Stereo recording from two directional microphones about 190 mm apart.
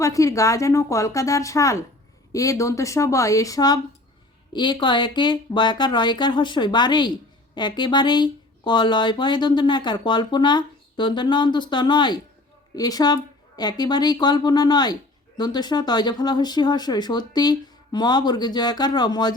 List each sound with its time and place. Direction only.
0.0 s a woman's voice: 15° left (ahead or behind)